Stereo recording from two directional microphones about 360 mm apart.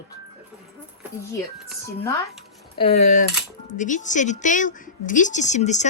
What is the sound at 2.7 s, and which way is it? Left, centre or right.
Speech, centre.